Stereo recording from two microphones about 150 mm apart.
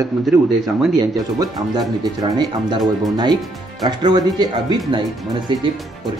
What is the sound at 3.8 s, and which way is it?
Speech, 30° right (ahead or behind).